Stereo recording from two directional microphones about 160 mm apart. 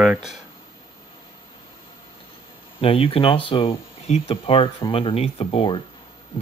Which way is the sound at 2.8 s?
35° left (ahead or behind).